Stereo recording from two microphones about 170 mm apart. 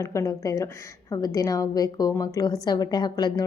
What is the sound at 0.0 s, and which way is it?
A woman's voice, 15° left (ahead or behind).